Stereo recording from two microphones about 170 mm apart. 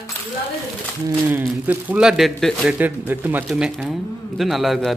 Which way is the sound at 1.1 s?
15° right (ahead or behind).